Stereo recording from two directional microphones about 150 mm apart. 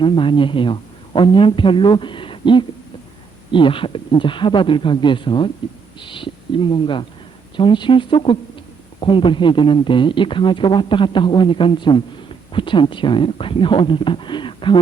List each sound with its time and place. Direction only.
0.0 s speech: 35° left (ahead or behind)